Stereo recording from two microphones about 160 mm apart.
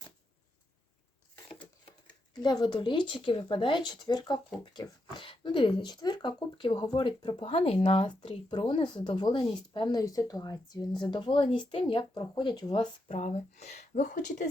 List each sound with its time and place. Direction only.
2.4 s speech: 25° left (ahead or behind)
13.1 s speech: 45° left (ahead or behind)